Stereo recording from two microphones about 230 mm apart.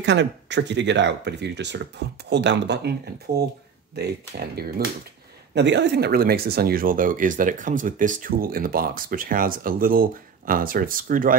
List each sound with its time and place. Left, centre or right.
0.0 s speech: right